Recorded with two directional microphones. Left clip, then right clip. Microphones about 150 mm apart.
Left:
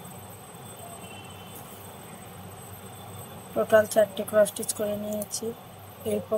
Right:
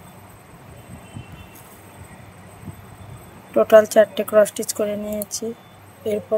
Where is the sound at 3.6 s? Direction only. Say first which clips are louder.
Right 8 dB; 90° right.